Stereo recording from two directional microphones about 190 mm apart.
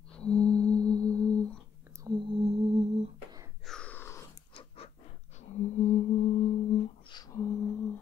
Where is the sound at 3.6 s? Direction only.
5° left (ahead or behind).